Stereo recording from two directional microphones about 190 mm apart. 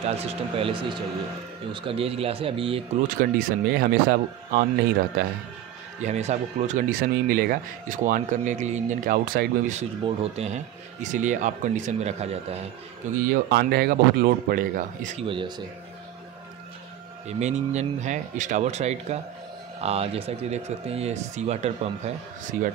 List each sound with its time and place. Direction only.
0.2 s speech: 30° right (ahead or behind)
3.2 s speech: 50° right (ahead or behind)
5.9 s speech: 35° right (ahead or behind)
10.0 s speech: 30° right (ahead or behind)
13.3 s speech: 55° right (ahead or behind)
15.2 s speech: 25° right (ahead or behind)
17.4 s speech: 35° right (ahead or behind)